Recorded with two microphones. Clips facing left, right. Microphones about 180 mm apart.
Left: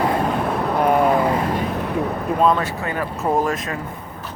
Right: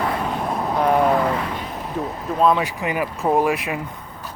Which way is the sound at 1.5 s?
55° left (ahead or behind).